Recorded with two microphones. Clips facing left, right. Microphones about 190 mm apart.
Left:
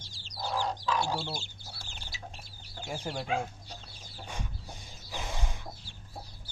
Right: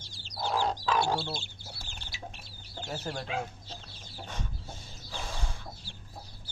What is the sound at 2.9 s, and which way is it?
Speech, 10° left (ahead or behind).